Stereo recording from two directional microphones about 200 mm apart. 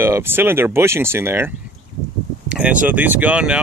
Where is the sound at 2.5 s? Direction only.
5° right (ahead or behind).